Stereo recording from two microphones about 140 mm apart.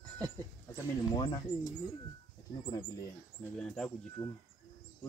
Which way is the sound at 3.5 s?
5° left (ahead or behind).